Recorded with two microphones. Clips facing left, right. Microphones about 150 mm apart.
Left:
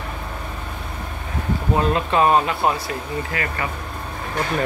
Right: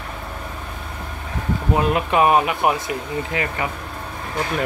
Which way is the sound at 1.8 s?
15° right (ahead or behind).